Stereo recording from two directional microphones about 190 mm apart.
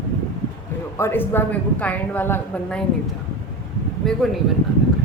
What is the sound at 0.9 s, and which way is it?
Speech, 10° left (ahead or behind).